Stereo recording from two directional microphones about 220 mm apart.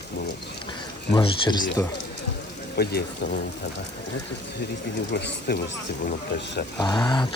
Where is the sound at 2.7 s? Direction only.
45° left (ahead or behind).